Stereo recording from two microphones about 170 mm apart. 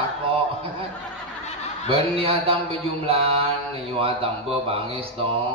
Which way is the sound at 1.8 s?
35° right (ahead or behind).